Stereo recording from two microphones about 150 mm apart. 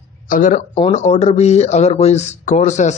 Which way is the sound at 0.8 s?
50° left (ahead or behind).